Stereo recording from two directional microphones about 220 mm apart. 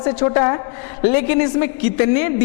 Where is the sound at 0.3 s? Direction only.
20° left (ahead or behind).